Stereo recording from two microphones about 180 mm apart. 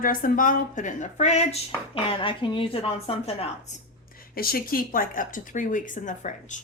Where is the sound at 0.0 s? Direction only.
50° left (ahead or behind).